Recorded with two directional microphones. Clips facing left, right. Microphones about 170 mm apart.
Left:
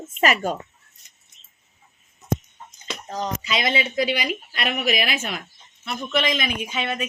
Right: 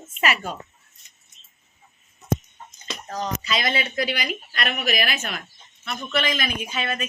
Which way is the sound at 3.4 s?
20° left (ahead or behind).